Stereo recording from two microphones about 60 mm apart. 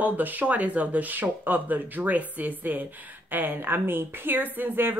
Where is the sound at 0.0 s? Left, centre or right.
Right.